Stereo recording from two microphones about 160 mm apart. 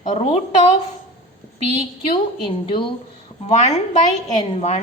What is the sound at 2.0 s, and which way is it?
A woman's voice, 30° left (ahead or behind).